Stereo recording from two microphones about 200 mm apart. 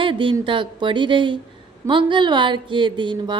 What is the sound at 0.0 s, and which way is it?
Speech, 25° right (ahead or behind).